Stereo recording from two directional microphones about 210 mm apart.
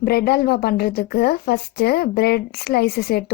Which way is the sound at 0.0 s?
50° left (ahead or behind).